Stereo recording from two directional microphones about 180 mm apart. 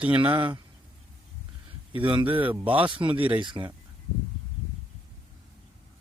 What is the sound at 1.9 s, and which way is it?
Speech, 30° right (ahead or behind).